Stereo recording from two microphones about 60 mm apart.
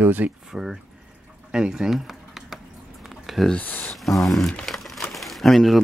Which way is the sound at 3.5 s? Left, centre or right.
Left.